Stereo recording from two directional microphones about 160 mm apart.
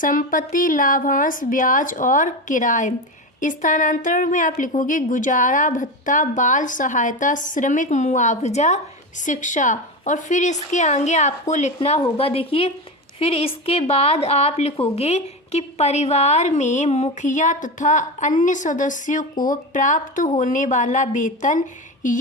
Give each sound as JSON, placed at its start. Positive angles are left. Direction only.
{"t": 0.0, "sound": "a woman's voice", "side_deg": 55}